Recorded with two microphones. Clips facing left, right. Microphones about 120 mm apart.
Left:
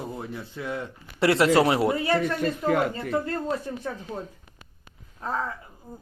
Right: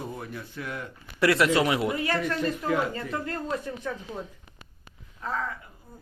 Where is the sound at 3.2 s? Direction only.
35° left (ahead or behind).